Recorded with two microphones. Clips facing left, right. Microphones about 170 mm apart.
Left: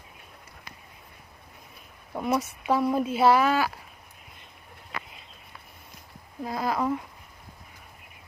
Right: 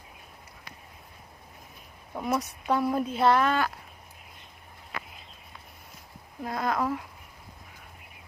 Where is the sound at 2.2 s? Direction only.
Centre (ahead or behind).